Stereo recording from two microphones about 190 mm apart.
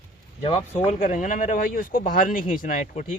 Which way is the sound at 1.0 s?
40° left (ahead or behind).